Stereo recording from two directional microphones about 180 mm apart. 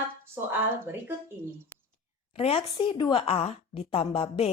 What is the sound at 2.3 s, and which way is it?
A woman's voice, 30° left (ahead or behind).